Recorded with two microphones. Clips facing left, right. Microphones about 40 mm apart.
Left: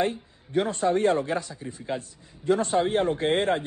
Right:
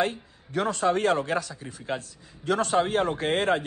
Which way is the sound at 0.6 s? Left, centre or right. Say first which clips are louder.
Left 1 dB; right.